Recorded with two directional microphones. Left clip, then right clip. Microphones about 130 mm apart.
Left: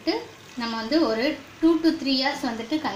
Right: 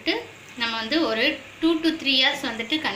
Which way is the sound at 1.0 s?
40° left (ahead or behind).